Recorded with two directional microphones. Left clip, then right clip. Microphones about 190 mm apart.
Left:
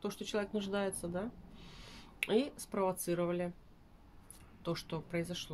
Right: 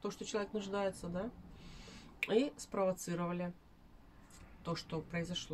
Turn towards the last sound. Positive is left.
turn(degrees=40)  # may be behind; listen again after turning